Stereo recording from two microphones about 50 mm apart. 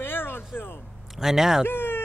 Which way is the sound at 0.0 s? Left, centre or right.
Left.